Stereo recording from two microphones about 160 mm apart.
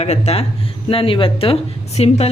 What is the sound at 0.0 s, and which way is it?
A woman's voice, 40° left (ahead or behind).